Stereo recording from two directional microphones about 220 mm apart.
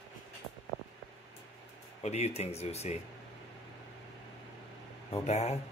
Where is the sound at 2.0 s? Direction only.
30° left (ahead or behind).